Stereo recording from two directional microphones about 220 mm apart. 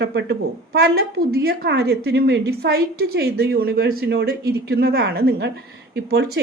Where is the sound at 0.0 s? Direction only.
50° right (ahead or behind).